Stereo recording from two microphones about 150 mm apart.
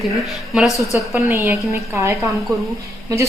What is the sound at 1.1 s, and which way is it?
A woman's voice, 15° right (ahead or behind).